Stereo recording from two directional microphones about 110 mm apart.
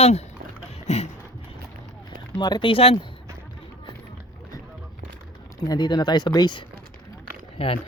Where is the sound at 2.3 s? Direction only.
40° left (ahead or behind).